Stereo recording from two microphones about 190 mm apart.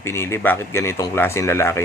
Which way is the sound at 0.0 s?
15° left (ahead or behind).